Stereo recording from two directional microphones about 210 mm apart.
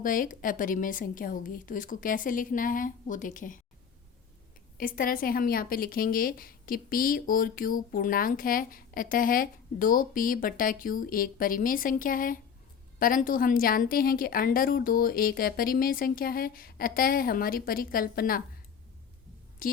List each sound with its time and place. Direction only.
0.0 s speech: 40° left (ahead or behind)
4.8 s a woman's voice: 40° left (ahead or behind)
19.6 s a woman's voice: 40° left (ahead or behind)